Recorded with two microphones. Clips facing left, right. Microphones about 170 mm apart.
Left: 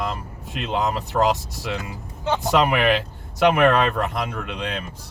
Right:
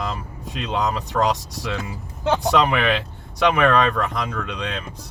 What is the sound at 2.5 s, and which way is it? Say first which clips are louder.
Speech: left 5 dB; 5° left (ahead or behind).